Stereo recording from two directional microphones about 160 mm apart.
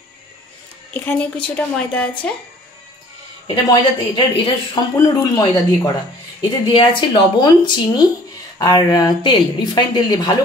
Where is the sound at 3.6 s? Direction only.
30° left (ahead or behind).